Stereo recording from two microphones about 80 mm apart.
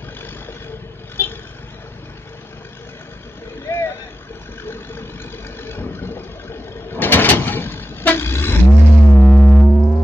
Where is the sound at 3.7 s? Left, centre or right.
Left.